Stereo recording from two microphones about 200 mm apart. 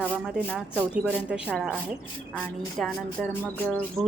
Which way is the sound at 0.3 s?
Centre (ahead or behind).